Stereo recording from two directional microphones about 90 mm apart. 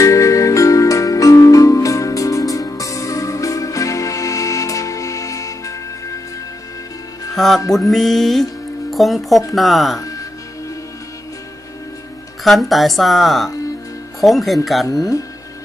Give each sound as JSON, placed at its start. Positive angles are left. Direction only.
{"t": 0.0, "sound": "music", "side_deg": 35}
{"t": 7.3, "sound": "music", "side_deg": 5}
{"t": 7.7, "sound": "a woman's voice", "side_deg": 5}
{"t": 9.9, "sound": "music", "side_deg": 40}
{"t": 12.4, "sound": "a woman's voice", "side_deg": 0}